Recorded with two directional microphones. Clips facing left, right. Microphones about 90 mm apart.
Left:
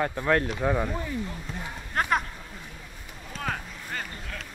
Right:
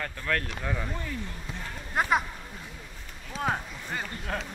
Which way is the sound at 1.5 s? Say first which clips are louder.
Left 2 dB; 5° right (ahead or behind).